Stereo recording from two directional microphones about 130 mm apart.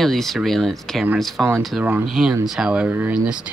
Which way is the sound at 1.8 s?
15° right (ahead or behind).